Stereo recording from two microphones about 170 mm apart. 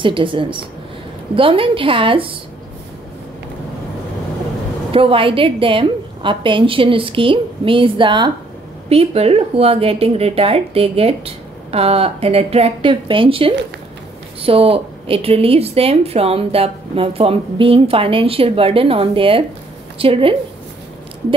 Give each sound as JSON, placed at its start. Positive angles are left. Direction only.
{"t": 0.0, "sound": "a woman's voice", "side_deg": -30}
{"t": 4.9, "sound": "a woman's voice", "side_deg": -30}